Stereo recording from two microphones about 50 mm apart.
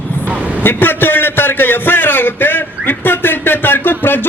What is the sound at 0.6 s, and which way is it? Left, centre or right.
A man's voice, left.